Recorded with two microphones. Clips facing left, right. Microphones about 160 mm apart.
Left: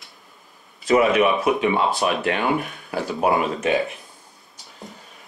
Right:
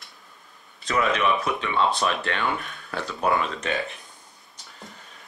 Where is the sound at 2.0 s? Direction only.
20° left (ahead or behind).